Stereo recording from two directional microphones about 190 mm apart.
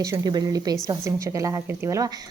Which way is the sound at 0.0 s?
20° right (ahead or behind).